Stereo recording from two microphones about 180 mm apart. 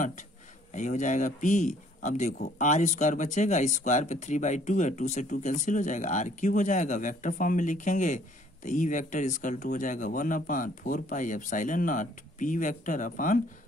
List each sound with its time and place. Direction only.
0.7 s speech: 45° left (ahead or behind)